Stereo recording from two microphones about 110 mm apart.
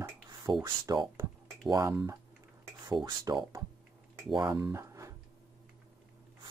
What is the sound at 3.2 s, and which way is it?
Speech, 30° right (ahead or behind).